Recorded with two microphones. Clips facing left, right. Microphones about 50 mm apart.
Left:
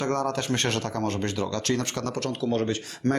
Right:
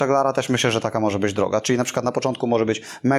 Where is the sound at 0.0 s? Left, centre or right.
Right.